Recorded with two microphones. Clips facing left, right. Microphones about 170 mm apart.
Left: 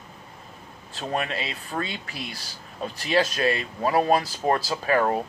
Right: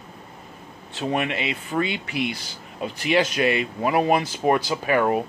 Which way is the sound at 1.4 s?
15° right (ahead or behind).